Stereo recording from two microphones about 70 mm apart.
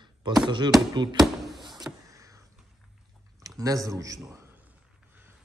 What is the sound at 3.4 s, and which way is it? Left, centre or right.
Speech, right.